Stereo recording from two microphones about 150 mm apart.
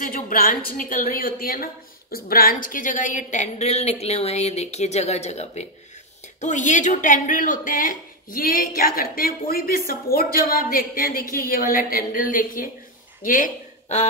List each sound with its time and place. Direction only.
0.0 s a woman's voice: 70° left (ahead or behind)